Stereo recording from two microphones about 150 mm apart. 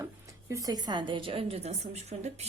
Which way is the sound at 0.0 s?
20° right (ahead or behind).